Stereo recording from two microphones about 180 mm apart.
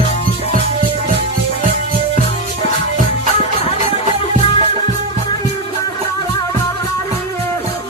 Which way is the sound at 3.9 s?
30° left (ahead or behind).